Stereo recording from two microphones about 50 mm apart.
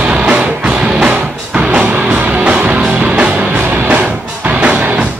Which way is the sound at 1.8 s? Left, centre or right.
Right.